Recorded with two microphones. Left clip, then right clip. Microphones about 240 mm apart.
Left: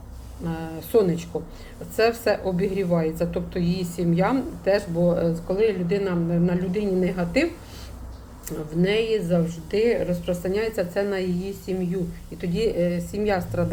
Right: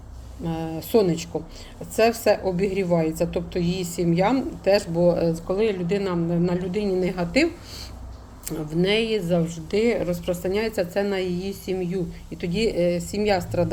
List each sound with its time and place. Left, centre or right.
0.4 s a woman's voice: right
8.4 s a woman's voice: right